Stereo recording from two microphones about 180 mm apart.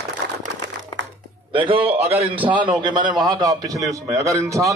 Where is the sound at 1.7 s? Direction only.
30° right (ahead or behind).